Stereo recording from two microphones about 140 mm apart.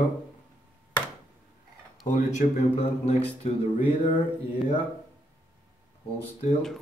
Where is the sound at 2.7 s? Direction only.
45° left (ahead or behind).